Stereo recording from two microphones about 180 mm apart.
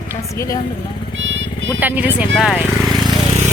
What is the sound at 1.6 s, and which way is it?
Speech, 10° right (ahead or behind).